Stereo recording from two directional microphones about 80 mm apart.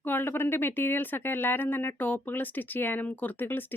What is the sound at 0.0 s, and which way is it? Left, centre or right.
Speech, left.